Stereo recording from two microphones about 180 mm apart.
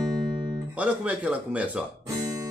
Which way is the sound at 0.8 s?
5° right (ahead or behind).